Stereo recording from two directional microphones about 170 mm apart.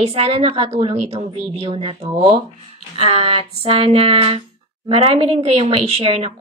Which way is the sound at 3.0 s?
35° right (ahead or behind).